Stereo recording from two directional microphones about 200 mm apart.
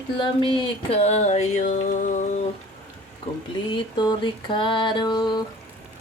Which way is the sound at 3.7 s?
20° left (ahead or behind).